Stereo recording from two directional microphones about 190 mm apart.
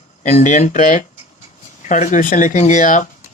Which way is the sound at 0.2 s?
40° left (ahead or behind).